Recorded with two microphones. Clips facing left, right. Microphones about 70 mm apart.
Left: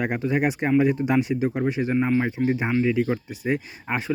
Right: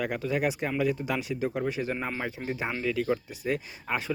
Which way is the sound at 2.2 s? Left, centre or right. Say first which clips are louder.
Left 8 dB; centre.